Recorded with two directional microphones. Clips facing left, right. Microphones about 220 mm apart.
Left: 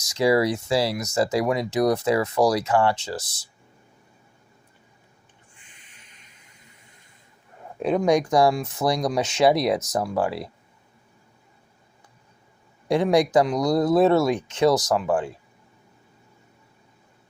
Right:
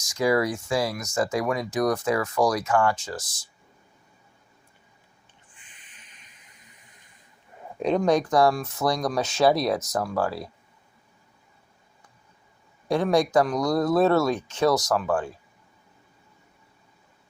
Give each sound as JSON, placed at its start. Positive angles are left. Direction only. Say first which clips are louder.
{"t": 0.2, "sound": "speech", "louder": "left 3 dB", "side_deg": 25}
{"t": 5.9, "sound": "a sound", "louder": "left 1 dB", "side_deg": -20}
{"t": 7.8, "sound": "speech", "louder": "left 1 dB", "side_deg": 5}
{"t": 12.9, "sound": "speech", "louder": "left 2 dB", "side_deg": 15}